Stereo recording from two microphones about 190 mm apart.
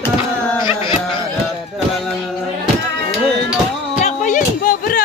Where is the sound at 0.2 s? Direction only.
25° left (ahead or behind).